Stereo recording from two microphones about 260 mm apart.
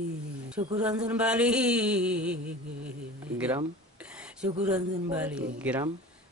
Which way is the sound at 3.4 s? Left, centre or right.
Centre.